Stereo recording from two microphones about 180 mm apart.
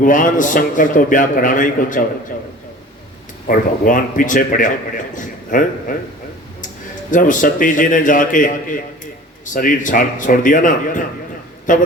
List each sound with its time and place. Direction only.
0.0 s a man's voice: 45° left (ahead or behind)
3.4 s a man's voice: 45° left (ahead or behind)
7.1 s a man's voice: 45° left (ahead or behind)